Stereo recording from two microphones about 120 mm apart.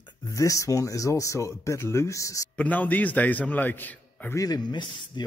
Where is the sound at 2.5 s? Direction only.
15° left (ahead or behind).